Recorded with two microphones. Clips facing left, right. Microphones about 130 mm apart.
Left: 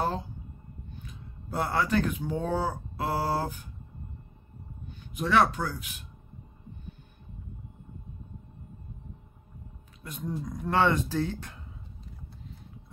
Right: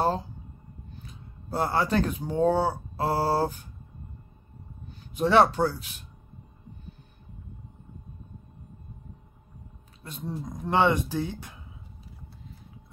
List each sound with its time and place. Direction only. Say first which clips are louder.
0.9 s speech: left 1 dB; 35° right (ahead or behind)
3.0 s mantra: right 4 dB; 35° right (ahead or behind)
4.8 s speech: right 6 dB; 30° right (ahead or behind)
10.0 s speech: even; 30° right (ahead or behind); by 11.5 s 15° right (ahead or behind)